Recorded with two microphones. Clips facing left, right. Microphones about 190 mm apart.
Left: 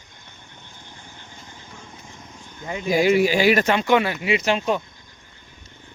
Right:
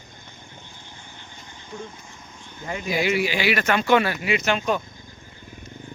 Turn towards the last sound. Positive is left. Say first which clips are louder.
# left 2 dB
turn(degrees=25)  # may be behind; listen again after turning